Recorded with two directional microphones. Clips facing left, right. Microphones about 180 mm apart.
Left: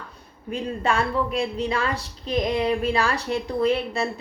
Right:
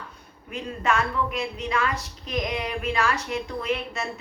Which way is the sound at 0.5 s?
30° left (ahead or behind).